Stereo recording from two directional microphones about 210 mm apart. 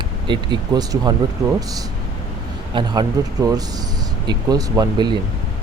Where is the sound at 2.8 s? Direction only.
20° right (ahead or behind).